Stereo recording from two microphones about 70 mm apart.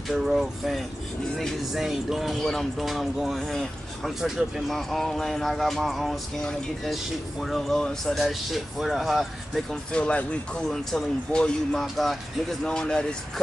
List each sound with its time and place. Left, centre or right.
0.1 s speech: centre
9.9 s speech: centre
12.6 s speech: centre